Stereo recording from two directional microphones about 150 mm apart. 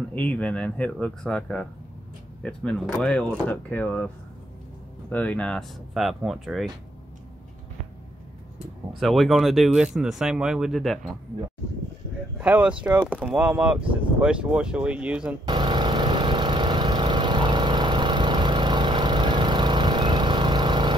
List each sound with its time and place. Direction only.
0.1 s speech: 10° left (ahead or behind)
5.1 s speech: 10° left (ahead or behind)
9.0 s speech: centre (ahead or behind)
12.4 s speech: 10° right (ahead or behind)
15.4 s lawn mower: 30° right (ahead or behind)